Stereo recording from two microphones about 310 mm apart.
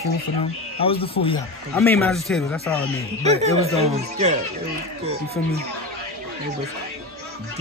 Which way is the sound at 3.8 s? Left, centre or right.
Right.